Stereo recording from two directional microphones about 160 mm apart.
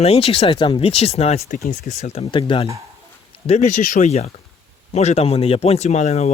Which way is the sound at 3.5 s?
45° left (ahead or behind).